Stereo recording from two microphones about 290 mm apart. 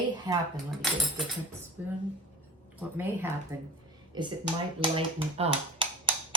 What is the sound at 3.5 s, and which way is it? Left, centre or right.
Speech, centre.